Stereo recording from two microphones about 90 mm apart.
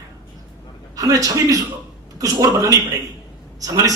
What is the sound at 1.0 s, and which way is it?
A man's voice, 40° right (ahead or behind).